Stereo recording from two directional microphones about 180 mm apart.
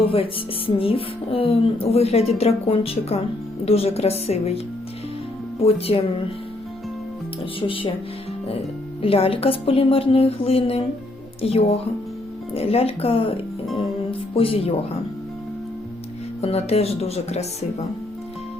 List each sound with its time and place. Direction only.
0.7 s a woman's voice: 30° left (ahead or behind)
7.7 s speech: 30° left (ahead or behind)
9.0 s a woman's voice: 30° left (ahead or behind)
13.7 s music: 30° left (ahead or behind)
16.4 s a woman's voice: 35° left (ahead or behind)